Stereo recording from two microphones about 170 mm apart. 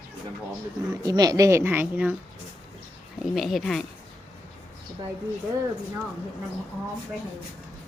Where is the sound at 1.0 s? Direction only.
20° right (ahead or behind).